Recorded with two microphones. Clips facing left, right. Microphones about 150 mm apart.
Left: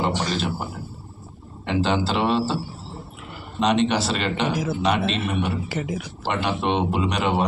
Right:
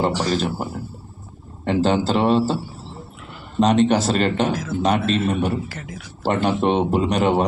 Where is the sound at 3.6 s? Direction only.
45° right (ahead or behind).